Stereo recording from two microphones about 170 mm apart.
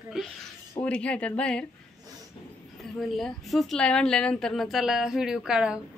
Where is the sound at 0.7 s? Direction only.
5° left (ahead or behind).